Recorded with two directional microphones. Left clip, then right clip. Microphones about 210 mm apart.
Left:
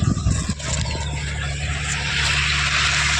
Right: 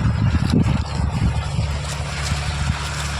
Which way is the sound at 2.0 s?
50° right (ahead or behind).